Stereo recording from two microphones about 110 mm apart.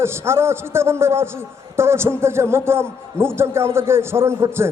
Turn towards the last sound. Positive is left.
turn(degrees=-25)  # may be behind; listen again after turning